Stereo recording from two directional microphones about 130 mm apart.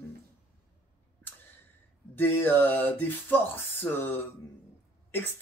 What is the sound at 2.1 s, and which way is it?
Speech, 15° left (ahead or behind).